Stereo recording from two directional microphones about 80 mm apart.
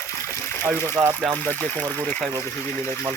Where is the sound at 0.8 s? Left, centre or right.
Right.